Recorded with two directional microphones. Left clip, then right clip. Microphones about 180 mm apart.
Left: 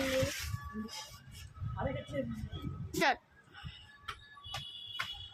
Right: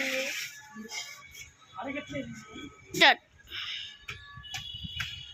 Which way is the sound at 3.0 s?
5° right (ahead or behind).